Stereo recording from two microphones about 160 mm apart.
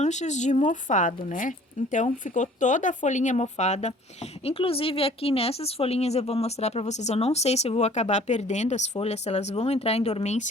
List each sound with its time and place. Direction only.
0.0 s speech: 45° left (ahead or behind)